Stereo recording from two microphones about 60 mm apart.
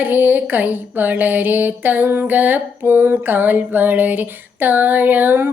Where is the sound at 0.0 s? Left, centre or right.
Right.